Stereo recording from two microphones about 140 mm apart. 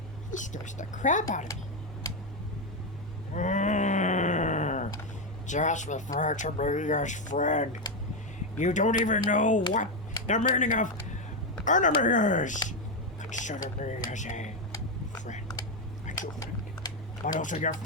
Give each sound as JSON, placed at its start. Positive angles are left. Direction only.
{"t": 0.3, "sound": "speech", "side_deg": 60}
{"t": 3.3, "sound": "groan", "side_deg": 60}
{"t": 5.5, "sound": "speech", "side_deg": 60}
{"t": 16.1, "sound": "a sound", "side_deg": 65}
{"t": 17.2, "sound": "speech", "side_deg": 65}